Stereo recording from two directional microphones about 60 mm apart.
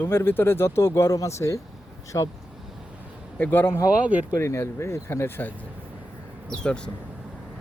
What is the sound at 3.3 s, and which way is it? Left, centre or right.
Speech, left.